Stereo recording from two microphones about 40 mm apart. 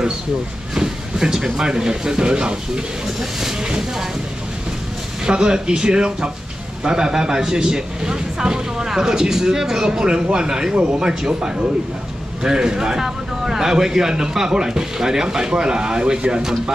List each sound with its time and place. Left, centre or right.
0.7 s a man's voice: centre
5.2 s a man's voice: centre